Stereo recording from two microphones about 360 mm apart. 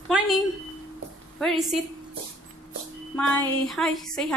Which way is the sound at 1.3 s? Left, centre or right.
Centre.